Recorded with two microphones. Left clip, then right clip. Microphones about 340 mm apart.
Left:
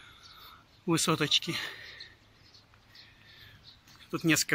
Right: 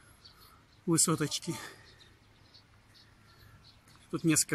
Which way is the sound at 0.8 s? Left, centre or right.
Centre.